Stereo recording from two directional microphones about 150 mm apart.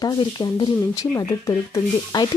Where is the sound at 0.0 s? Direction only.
30° left (ahead or behind).